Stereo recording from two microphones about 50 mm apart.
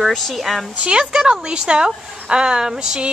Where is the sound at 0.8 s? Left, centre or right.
Centre.